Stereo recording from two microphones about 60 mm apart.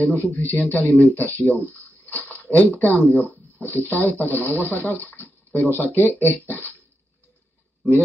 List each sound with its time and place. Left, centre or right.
0.0 s a man's voice: left
2.2 s a sound: left
2.8 s a man's voice: left